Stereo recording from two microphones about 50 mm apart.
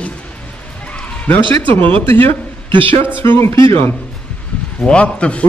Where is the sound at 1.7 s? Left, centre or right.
Left.